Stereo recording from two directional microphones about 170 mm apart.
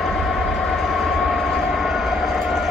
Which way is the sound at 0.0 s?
Centre (ahead or behind).